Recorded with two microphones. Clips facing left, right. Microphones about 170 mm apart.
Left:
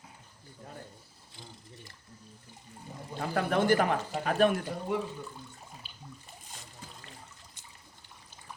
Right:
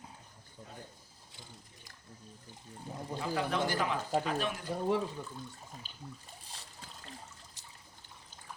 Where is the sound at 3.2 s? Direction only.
55° left (ahead or behind).